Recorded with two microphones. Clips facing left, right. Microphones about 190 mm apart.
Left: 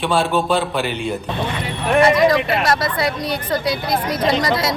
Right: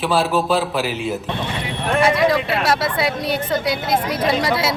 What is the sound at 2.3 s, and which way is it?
A man's voice, 5° right (ahead or behind).